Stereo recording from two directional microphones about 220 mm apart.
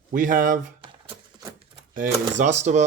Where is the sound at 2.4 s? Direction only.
30° right (ahead or behind).